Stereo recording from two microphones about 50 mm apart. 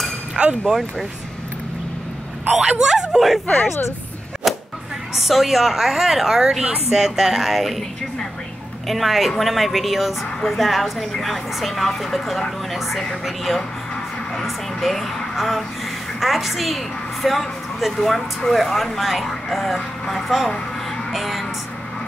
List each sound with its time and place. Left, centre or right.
0.7 s speech: centre
2.6 s speech: centre
4.4 s whip: centre
5.1 s speech: centre
6.6 s speech: centre
7.0 s a woman's voice: centre
21.1 s music: centre